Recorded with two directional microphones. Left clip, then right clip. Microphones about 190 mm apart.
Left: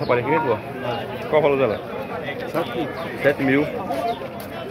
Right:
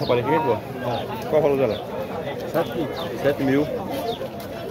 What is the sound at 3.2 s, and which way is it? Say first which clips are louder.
Speech: left 3 dB; centre (ahead or behind).